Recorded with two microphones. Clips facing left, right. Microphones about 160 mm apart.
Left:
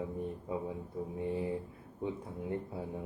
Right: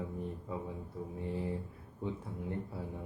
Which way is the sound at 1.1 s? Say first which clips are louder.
Left 3 dB; 20° left (ahead or behind).